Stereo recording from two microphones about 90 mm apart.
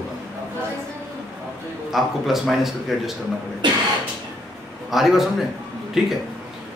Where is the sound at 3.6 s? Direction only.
60° right (ahead or behind).